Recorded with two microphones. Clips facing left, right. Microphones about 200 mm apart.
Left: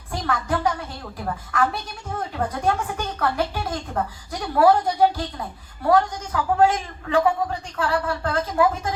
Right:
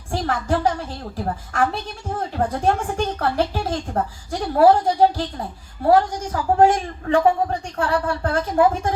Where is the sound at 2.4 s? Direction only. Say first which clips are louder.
Right 4 dB; 50° right (ahead or behind).